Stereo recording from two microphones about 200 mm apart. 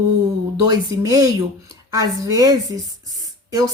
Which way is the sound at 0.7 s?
20° right (ahead or behind).